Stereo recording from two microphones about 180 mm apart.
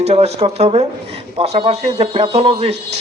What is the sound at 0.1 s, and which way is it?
A man's voice, 35° right (ahead or behind).